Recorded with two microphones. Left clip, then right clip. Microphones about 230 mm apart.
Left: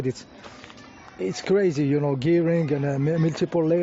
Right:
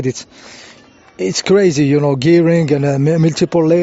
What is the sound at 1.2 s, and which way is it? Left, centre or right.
Speech, right.